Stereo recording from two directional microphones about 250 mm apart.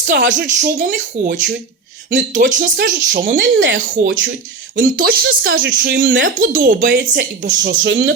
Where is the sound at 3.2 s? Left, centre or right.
Right.